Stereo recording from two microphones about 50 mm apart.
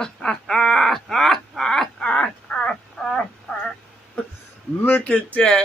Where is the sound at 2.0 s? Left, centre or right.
Left.